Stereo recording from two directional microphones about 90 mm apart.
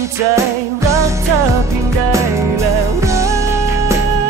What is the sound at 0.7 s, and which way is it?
Music, 35° right (ahead or behind).